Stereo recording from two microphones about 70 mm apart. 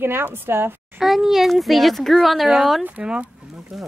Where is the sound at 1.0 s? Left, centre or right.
Centre.